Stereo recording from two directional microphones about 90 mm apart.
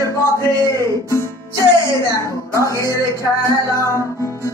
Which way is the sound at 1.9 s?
35° left (ahead or behind).